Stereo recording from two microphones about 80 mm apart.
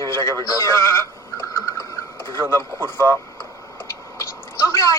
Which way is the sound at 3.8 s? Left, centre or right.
Left.